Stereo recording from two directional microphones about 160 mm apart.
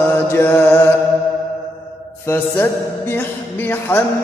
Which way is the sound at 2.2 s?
15° left (ahead or behind).